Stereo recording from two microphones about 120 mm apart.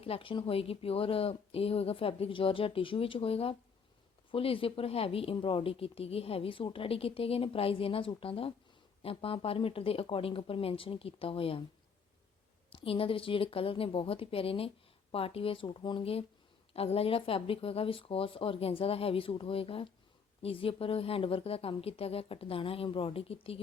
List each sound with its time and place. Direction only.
0.0 s speech: 50° left (ahead or behind)
12.7 s speech: 50° left (ahead or behind)